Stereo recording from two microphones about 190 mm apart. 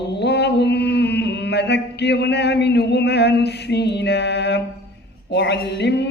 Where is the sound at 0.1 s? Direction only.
60° left (ahead or behind).